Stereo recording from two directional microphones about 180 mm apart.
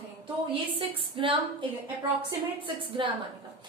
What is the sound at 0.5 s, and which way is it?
Speech, 30° right (ahead or behind).